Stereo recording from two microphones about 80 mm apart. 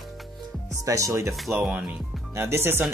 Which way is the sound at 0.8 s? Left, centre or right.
Right.